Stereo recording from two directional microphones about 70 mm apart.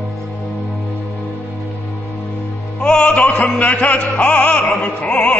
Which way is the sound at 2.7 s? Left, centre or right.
Centre.